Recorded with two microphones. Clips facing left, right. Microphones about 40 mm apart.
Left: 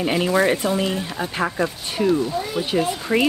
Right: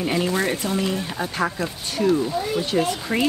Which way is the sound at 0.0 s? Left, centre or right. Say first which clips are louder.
Left 3 dB; centre.